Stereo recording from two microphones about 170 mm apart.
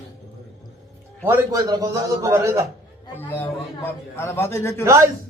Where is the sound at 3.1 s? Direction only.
10° left (ahead or behind).